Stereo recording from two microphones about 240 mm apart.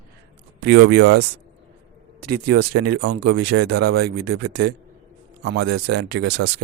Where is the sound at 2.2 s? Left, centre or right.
Right.